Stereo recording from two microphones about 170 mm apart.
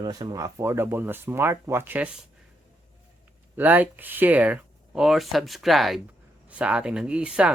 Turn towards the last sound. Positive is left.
turn(degrees=-5)  # may be behind; listen again after turning